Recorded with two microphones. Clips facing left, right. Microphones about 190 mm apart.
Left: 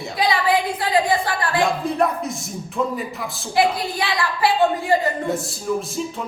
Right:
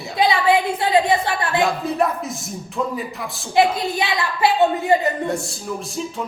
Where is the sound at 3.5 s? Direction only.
20° right (ahead or behind).